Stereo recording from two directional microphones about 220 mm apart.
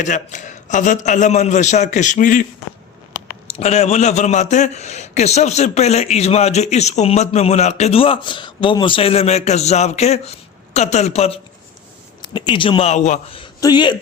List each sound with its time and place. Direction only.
0.0 s a man's voice: 35° left (ahead or behind)
3.6 s a man's voice: 30° left (ahead or behind)